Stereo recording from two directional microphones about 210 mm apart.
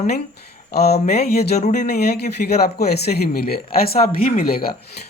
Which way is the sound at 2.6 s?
50° left (ahead or behind).